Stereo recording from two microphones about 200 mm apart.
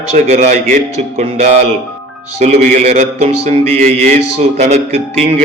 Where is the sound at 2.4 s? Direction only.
35° right (ahead or behind).